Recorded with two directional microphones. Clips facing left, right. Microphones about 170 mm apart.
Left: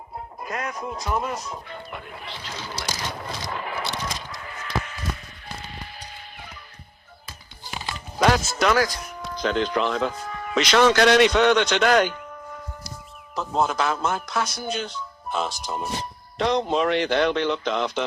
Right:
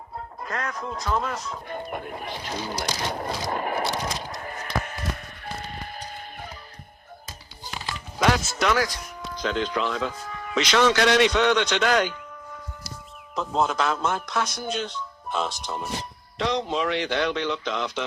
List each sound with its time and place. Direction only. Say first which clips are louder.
0.4 s speech: left 1 dB; 15° left (ahead or behind)
1.6 s speech: right 5 dB; 45° right (ahead or behind)
3.1 s a sound: right 4 dB; 45° right (ahead or behind)
7.9 s music: left 2 dB; 40° left (ahead or behind)
9.4 s speech: left 3 dB; 55° left (ahead or behind)
13.3 s speech: left 1 dB; 5° left (ahead or behind)
16.4 s speech: left 4 dB; 50° left (ahead or behind)